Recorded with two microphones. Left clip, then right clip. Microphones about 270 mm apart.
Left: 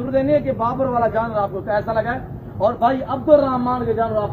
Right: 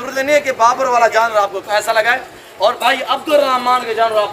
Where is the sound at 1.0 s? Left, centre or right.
Centre.